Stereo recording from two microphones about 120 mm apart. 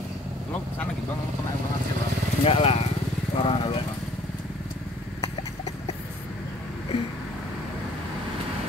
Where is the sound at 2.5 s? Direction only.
55° left (ahead or behind).